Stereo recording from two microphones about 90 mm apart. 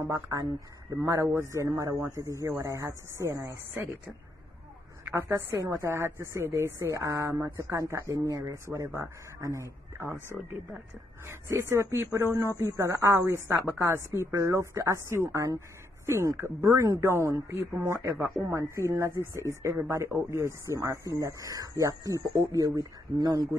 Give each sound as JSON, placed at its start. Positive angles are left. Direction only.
{"t": 0.1, "sound": "a woman's voice", "side_deg": -40}
{"t": 5.1, "sound": "a woman's voice", "side_deg": -30}
{"t": 11.2, "sound": "a woman's voice", "side_deg": -30}